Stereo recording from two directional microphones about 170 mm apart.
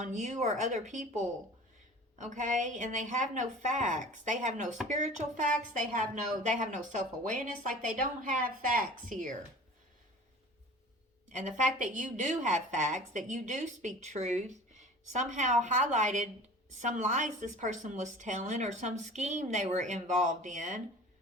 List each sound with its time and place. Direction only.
0.0 s speech: 45° right (ahead or behind)
11.3 s speech: 45° right (ahead or behind)